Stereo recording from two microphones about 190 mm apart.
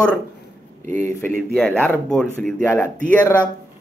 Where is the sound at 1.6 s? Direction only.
10° left (ahead or behind).